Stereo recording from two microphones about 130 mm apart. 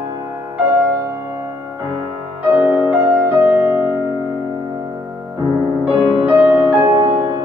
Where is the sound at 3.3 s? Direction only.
20° right (ahead or behind).